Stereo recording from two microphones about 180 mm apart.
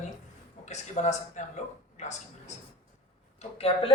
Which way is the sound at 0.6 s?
40° left (ahead or behind).